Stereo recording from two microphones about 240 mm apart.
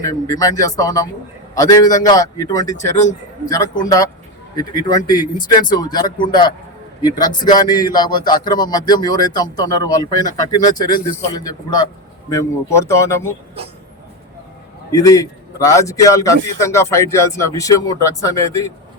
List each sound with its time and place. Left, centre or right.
0.0 s a man's voice: centre
14.9 s a man's voice: centre